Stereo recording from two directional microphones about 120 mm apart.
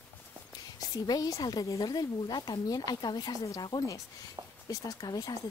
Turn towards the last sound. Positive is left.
turn(degrees=30)  # may be behind; listen again after turning